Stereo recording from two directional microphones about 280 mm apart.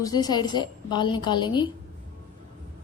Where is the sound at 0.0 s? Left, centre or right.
Centre.